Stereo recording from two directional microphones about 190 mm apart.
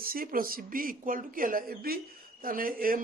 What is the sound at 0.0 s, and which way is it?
Speech, 50° right (ahead or behind).